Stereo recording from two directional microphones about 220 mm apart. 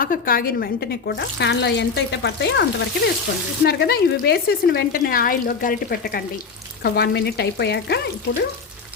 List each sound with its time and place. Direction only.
0.0 s speech: 40° left (ahead or behind)